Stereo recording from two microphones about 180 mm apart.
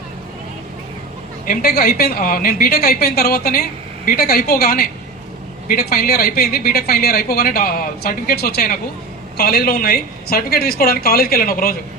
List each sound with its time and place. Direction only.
1.5 s a woman's voice: 60° left (ahead or behind)